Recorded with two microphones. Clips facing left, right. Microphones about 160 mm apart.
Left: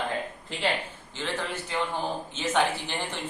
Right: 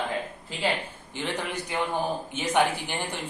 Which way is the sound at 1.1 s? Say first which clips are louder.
Right 1 dB; 15° right (ahead or behind).